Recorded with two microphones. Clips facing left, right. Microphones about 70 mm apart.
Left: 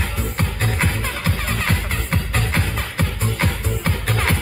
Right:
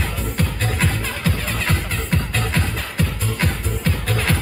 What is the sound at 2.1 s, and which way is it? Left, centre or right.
Music, left.